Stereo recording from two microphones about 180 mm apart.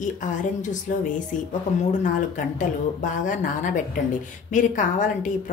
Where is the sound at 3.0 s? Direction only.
45° left (ahead or behind).